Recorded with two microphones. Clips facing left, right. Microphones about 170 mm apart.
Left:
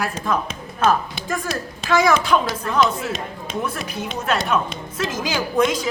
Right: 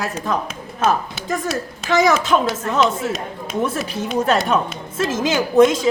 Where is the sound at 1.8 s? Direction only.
20° right (ahead or behind).